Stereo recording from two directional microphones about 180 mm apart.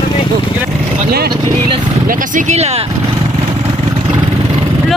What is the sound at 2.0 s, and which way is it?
Speech, 45° right (ahead or behind).